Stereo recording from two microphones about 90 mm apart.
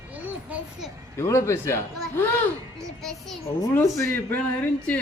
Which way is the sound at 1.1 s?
30° left (ahead or behind).